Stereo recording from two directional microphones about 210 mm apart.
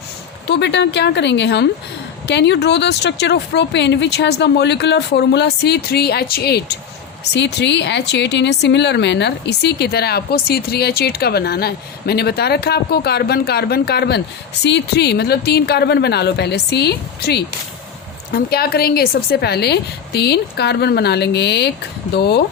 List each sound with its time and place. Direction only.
0.4 s speech: 55° left (ahead or behind)